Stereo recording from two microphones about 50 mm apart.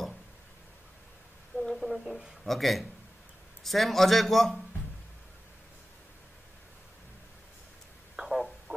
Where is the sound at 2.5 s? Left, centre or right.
Centre.